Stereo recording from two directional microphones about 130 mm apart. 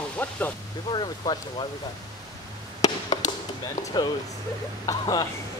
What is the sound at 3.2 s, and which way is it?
Chop, 65° left (ahead or behind).